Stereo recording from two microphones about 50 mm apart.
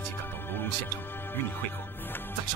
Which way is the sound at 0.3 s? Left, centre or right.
Left.